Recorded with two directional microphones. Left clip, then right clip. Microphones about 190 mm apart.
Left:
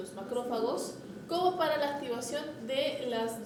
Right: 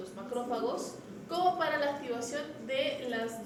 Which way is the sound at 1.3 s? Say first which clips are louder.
Even; 45° left (ahead or behind).